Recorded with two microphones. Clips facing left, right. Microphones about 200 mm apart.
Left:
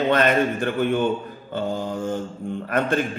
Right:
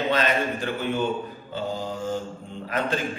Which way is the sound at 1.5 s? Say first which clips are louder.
Left 5 dB; 55° left (ahead or behind).